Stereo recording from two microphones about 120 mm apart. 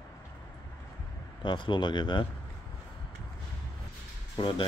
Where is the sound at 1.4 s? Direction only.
45° left (ahead or behind).